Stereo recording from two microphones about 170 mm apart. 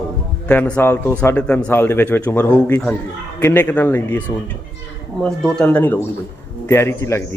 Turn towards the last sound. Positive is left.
turn(degrees=15)  # may be behind; listen again after turning